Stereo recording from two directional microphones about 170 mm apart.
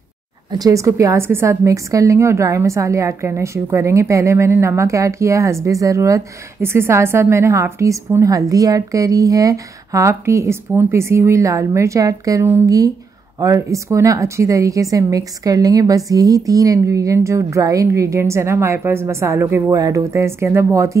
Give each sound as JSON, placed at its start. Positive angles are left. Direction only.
{"t": 0.5, "sound": "a woman's voice", "side_deg": -20}